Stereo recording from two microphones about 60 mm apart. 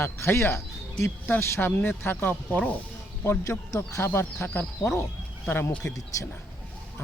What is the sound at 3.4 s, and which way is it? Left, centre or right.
Speech, left.